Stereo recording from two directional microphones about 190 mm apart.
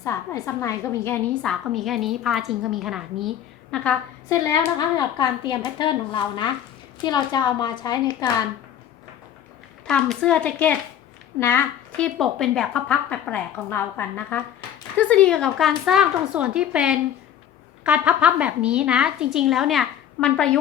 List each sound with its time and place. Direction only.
0.0 s a woman's voice: 15° left (ahead or behind)
4.9 s a woman's voice: 25° left (ahead or behind)
9.8 s a woman's voice: 5° left (ahead or behind)